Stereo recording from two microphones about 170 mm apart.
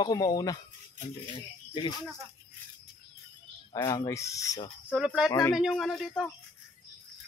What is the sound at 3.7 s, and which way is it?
Speech, 20° left (ahead or behind).